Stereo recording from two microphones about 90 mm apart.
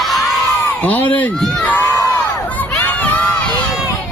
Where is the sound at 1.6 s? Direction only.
20° left (ahead or behind).